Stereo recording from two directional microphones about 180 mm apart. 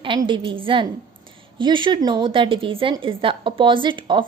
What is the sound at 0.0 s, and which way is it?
A woman's voice, 25° right (ahead or behind).